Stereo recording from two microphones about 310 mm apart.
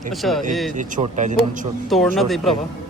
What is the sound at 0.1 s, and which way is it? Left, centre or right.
Speech, centre.